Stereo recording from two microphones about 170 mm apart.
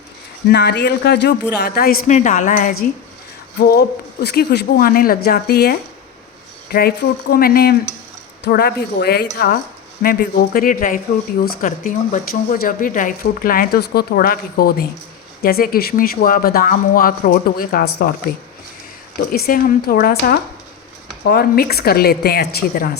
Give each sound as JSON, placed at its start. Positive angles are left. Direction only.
{"t": 0.4, "sound": "speech", "side_deg": 75}
{"t": 3.7, "sound": "speech", "side_deg": 70}
{"t": 10.0, "sound": "speech", "side_deg": 60}